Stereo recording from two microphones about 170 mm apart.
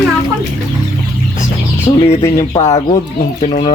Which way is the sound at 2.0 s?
35° left (ahead or behind).